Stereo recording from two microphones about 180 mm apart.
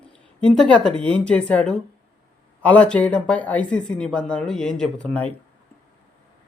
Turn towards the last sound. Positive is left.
turn(degrees=5)  # may be behind; listen again after turning